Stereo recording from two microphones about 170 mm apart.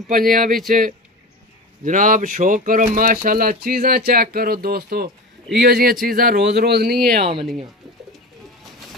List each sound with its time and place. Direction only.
0.1 s speech: 55° right (ahead or behind)
1.9 s speech: 50° right (ahead or behind); by 7.2 s 65° right (ahead or behind)